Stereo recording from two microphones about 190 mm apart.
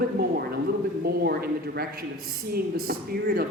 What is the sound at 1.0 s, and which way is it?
A woman's voice, 55° right (ahead or behind).